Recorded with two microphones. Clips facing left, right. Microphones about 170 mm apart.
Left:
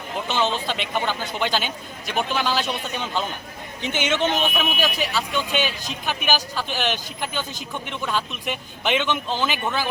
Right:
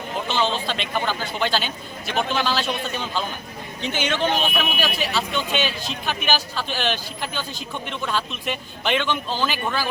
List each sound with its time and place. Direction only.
0.3 s speech: 15° left (ahead or behind)